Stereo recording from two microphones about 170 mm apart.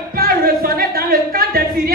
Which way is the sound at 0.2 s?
60° right (ahead or behind).